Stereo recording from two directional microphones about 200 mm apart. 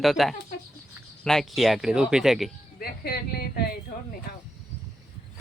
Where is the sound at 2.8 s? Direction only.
50° left (ahead or behind).